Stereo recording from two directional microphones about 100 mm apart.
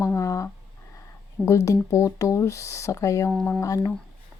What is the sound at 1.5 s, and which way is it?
Speech, 30° left (ahead or behind).